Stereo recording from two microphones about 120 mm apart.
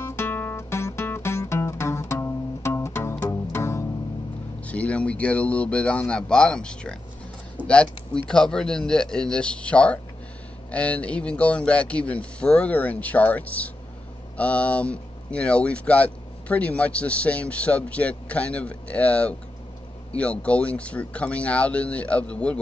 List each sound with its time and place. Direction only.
0.0 s music: 20° left (ahead or behind)
4.6 s speech: 10° left (ahead or behind)